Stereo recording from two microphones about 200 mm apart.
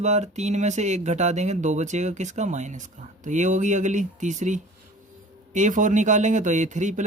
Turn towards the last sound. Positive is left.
turn(degrees=-35)  # may be behind; listen again after turning